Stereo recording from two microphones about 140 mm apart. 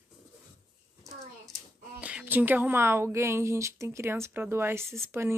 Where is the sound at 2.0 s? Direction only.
10° right (ahead or behind).